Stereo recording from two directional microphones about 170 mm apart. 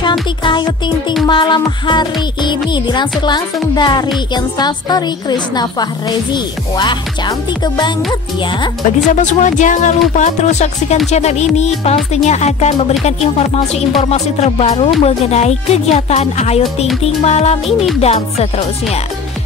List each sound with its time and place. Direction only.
0.4 s a woman's voice: 30° left (ahead or behind)
9.1 s speech: 45° left (ahead or behind)
11.1 s music: 40° left (ahead or behind)
14.0 s music: 40° left (ahead or behind)